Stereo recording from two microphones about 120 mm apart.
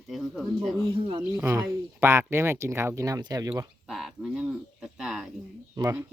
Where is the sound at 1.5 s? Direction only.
25° right (ahead or behind).